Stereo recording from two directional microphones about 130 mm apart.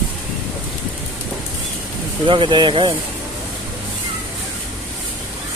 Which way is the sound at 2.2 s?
40° right (ahead or behind).